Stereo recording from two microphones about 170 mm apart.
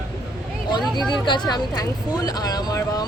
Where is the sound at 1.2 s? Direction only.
25° left (ahead or behind).